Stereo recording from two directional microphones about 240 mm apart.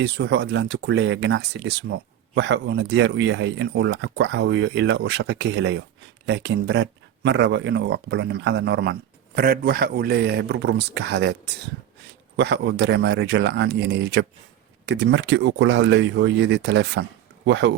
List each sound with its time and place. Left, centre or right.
0.0 s speech: right